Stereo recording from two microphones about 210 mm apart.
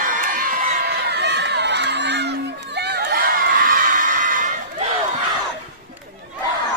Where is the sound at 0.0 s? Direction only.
40° right (ahead or behind).